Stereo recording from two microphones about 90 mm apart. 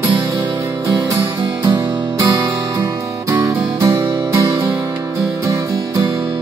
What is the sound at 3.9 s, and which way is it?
Music, 25° right (ahead or behind).